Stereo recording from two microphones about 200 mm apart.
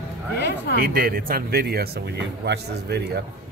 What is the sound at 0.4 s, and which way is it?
Speech, 55° left (ahead or behind).